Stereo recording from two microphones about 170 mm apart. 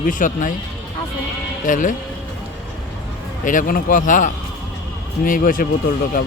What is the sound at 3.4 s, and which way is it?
A man's voice, 50° left (ahead or behind).